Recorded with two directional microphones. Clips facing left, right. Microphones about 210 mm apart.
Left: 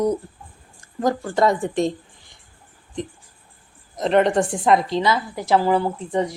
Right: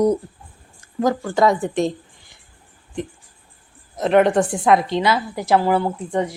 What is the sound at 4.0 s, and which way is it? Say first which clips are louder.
Speech: right 2 dB; 5° right (ahead or behind).